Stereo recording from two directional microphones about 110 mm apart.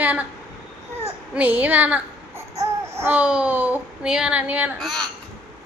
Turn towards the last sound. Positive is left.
turn(degrees=5)  # may be behind; listen again after turning